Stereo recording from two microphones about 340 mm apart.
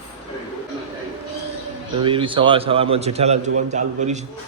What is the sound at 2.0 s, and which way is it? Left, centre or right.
A man's voice, centre.